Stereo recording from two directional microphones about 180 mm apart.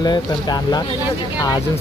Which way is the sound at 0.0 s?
20° left (ahead or behind).